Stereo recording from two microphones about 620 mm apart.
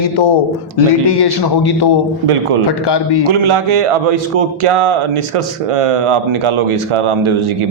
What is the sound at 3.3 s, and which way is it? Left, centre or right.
Speech, right.